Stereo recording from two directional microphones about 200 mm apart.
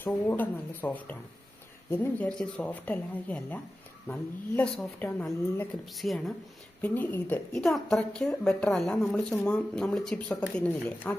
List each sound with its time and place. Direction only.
0.0 s a woman's voice: 10° left (ahead or behind)
2.1 s a woman's voice: 5° left (ahead or behind)